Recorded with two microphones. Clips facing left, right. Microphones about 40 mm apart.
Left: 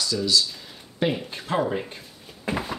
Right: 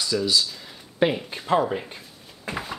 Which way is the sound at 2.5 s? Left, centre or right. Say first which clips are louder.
Left 3 dB; centre.